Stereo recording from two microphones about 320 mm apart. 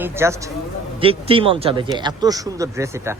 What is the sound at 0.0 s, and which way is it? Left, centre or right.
A man's voice, centre.